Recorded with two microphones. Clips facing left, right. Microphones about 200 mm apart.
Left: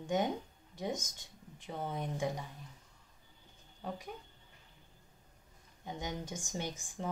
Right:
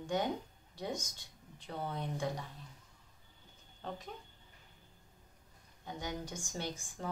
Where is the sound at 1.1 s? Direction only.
15° left (ahead or behind).